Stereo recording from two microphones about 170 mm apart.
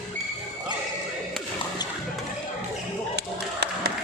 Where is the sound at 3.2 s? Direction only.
75° right (ahead or behind).